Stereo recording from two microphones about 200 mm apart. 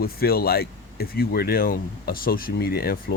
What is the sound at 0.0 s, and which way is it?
Speech, 50° left (ahead or behind).